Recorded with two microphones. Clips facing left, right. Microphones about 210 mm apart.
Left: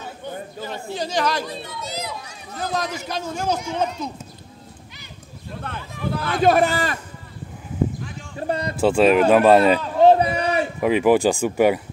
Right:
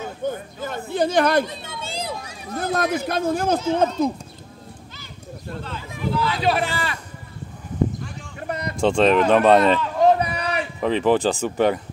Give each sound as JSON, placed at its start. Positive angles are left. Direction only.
{"t": 0.2, "sound": "chatter", "side_deg": -50}
{"t": 1.4, "sound": "chatter", "side_deg": -25}
{"t": 2.5, "sound": "a man's voice", "side_deg": -55}
{"t": 5.6, "sound": "speech", "side_deg": 55}
{"t": 8.4, "sound": "a sound", "side_deg": 30}
{"t": 8.7, "sound": "speech", "side_deg": 5}
{"t": 9.8, "sound": "a sound", "side_deg": 30}
{"t": 10.8, "sound": "speech", "side_deg": 10}